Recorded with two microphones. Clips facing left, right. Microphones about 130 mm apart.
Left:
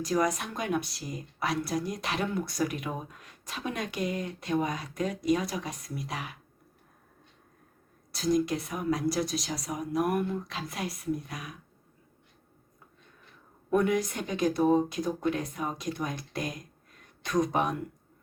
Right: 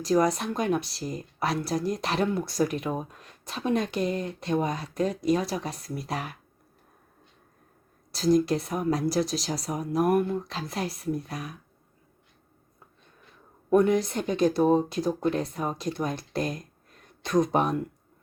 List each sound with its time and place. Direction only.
0.0 s speech: 30° right (ahead or behind)
8.1 s speech: 30° right (ahead or behind)
13.7 s speech: 30° right (ahead or behind)